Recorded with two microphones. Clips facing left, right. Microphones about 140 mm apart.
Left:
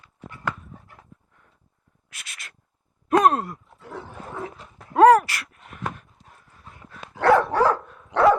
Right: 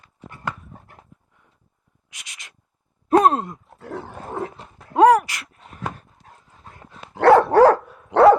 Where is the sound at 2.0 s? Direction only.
15° right (ahead or behind).